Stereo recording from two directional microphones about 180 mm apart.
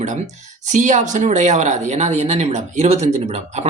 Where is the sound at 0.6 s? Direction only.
40° right (ahead or behind).